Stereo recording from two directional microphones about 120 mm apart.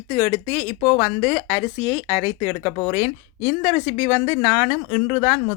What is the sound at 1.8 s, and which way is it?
Speech, 55° left (ahead or behind).